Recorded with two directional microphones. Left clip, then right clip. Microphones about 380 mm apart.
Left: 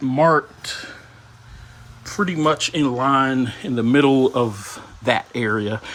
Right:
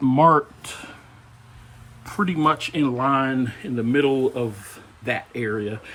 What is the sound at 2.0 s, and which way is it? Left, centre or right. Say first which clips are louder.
Speech: left 1 dB; centre.